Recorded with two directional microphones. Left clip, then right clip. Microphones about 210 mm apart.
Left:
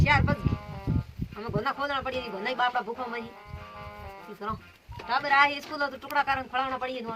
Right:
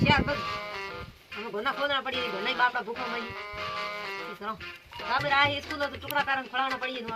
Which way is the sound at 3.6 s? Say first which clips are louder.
Right 10 dB; 50° right (ahead or behind).